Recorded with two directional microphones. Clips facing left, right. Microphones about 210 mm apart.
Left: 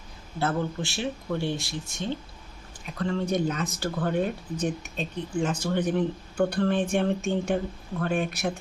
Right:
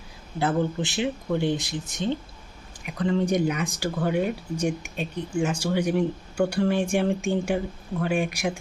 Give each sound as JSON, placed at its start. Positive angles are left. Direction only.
{"t": 0.3, "sound": "speech", "side_deg": -15}